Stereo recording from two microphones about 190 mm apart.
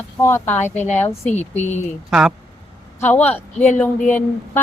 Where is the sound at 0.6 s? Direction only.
35° left (ahead or behind).